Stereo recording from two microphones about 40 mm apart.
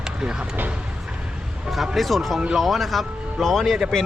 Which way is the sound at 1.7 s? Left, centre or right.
Centre.